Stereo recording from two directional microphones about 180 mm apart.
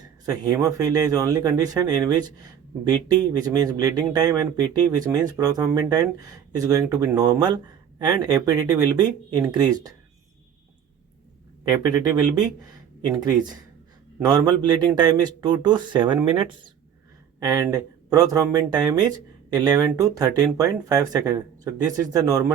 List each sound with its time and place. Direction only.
0.0 s speech: 20° right (ahead or behind)
11.7 s speech: 20° right (ahead or behind)